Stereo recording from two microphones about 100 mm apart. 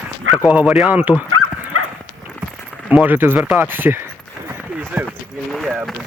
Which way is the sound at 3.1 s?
20° right (ahead or behind).